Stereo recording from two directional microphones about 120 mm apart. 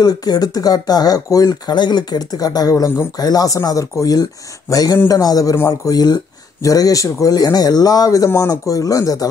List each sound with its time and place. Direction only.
0.0 s speech: 35° left (ahead or behind)